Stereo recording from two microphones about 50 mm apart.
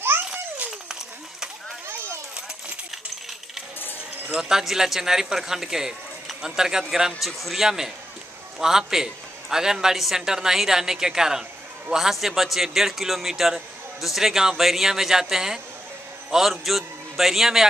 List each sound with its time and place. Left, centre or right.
0.3 s babbling: right
4.3 s a man's voice: centre
7.2 s a man's voice: centre